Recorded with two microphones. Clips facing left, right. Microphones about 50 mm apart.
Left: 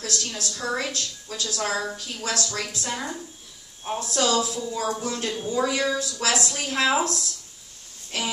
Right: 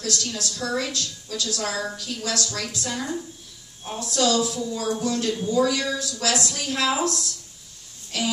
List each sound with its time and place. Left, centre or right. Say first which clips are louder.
0.0 s a woman's voice: right 2 dB; left